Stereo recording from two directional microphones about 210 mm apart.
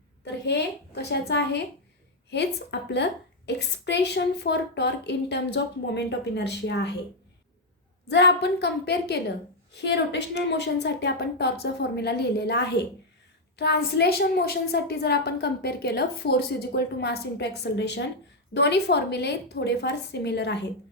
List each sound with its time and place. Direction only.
0.3 s a woman's voice: 55° left (ahead or behind)
8.1 s a woman's voice: 55° left (ahead or behind)